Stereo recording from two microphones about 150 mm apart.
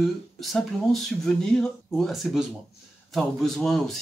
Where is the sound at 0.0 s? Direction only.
Centre (ahead or behind).